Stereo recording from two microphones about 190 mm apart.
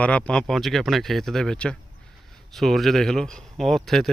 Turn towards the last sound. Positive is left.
turn(degrees=0)  # may be behind; listen again after turning